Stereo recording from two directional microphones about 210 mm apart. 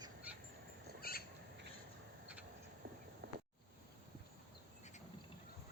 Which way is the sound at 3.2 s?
55° right (ahead or behind).